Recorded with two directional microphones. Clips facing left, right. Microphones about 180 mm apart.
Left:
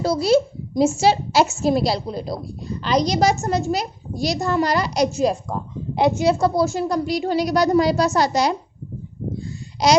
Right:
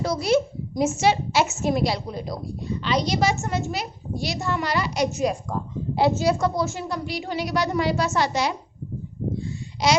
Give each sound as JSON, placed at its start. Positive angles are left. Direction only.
{"t": 0.0, "sound": "a woman's voice", "side_deg": 30}
{"t": 6.4, "sound": "a woman's voice", "side_deg": 35}